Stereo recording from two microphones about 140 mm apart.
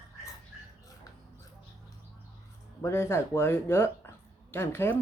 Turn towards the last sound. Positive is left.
turn(degrees=15)  # may be behind; listen again after turning